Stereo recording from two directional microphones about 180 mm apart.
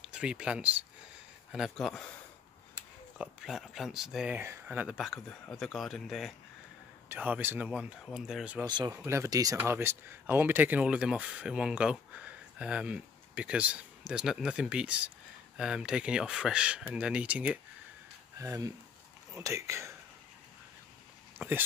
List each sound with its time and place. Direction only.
0.0 s speech: 5° right (ahead or behind)
3.2 s speech: 5° right (ahead or behind)
8.6 s speech: 25° right (ahead or behind)
21.4 s speech: 10° right (ahead or behind)